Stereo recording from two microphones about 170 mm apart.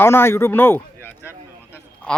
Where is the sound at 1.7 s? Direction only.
5° left (ahead or behind).